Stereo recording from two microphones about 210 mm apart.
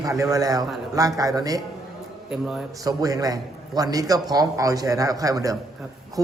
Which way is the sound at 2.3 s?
Centre (ahead or behind).